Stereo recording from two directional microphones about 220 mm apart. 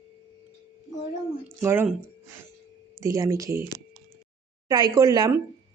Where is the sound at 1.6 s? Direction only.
10° right (ahead or behind).